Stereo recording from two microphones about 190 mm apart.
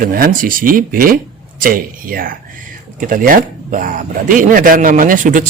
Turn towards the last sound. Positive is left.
turn(degrees=-45)  # may be behind; listen again after turning